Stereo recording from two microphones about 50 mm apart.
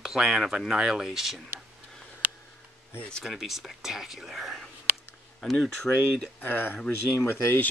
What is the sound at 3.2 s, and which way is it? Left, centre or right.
Speech, centre.